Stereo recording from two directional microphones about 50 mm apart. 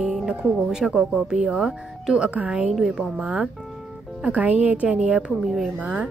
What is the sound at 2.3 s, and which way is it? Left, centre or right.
A woman's voice, right.